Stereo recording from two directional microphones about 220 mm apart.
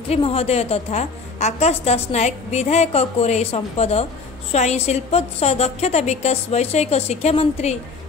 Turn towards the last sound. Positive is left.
turn(degrees=30)  # may be behind; listen again after turning